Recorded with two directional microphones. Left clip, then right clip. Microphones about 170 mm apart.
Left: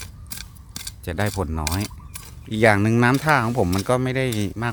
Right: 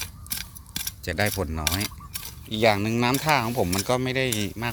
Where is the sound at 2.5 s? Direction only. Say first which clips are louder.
Left 4 dB; 45° left (ahead or behind).